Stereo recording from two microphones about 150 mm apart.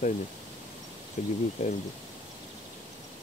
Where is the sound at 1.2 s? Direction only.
55° left (ahead or behind).